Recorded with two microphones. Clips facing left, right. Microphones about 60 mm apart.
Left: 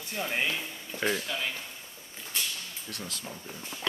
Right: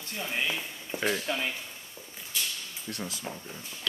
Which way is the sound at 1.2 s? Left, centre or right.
Centre.